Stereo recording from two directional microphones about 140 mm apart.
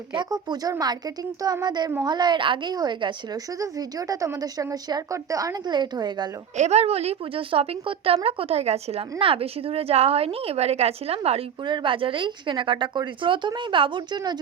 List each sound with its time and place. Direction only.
0.1 s a woman's voice: 30° right (ahead or behind)
6.6 s a woman's voice: 50° right (ahead or behind)
11.6 s speech: 35° right (ahead or behind)